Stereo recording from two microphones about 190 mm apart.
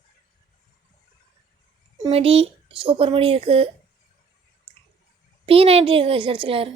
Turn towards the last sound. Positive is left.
turn(degrees=-30)  # may be behind; listen again after turning